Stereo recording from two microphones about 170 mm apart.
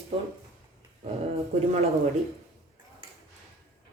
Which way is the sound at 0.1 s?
35° right (ahead or behind).